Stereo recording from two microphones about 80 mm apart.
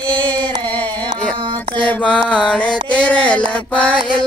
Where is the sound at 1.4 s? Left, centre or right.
Right.